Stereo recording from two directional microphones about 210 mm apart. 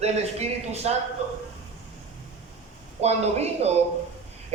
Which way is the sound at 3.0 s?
30° right (ahead or behind).